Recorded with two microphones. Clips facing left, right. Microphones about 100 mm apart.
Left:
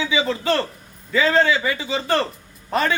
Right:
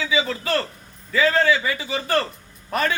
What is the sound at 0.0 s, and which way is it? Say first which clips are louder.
A man's voice: left 2 dB; 25° left (ahead or behind).